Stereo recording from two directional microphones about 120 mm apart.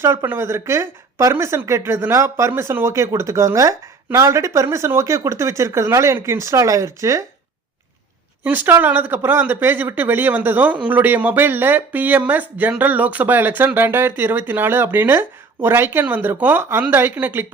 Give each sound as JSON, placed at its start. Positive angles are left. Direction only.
{"t": 0.0, "sound": "speech", "side_deg": -20}
{"t": 8.4, "sound": "speech", "side_deg": -15}